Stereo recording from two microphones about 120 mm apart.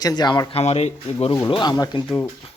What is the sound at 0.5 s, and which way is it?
Speech, 60° left (ahead or behind).